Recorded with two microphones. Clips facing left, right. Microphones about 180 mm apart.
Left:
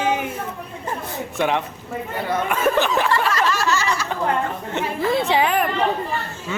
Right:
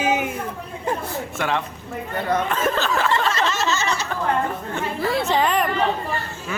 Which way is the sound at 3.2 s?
25° right (ahead or behind).